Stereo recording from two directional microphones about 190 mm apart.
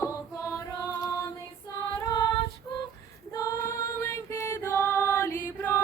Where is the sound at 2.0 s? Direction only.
20° left (ahead or behind).